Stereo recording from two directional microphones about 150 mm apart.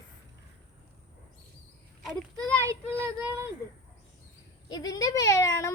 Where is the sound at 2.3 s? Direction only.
20° right (ahead or behind).